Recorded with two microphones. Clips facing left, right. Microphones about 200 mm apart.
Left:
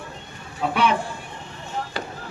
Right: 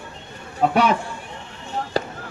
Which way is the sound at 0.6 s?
45° right (ahead or behind).